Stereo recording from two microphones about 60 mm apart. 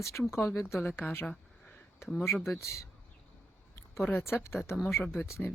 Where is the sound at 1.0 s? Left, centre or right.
Left.